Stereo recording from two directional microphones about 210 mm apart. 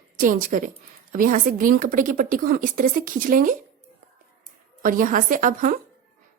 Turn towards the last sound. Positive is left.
turn(degrees=-40)  # may be behind; listen again after turning